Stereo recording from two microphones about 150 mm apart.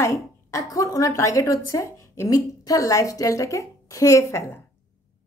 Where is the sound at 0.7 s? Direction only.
25° left (ahead or behind).